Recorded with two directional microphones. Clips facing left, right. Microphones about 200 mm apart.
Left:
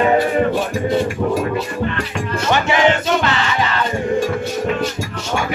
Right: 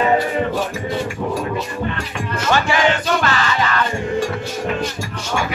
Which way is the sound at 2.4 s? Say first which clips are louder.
Left 2 dB; 20° left (ahead or behind).